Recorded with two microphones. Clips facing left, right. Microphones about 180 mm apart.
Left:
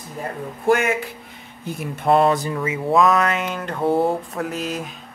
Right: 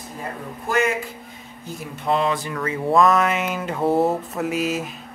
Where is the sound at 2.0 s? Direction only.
50° left (ahead or behind).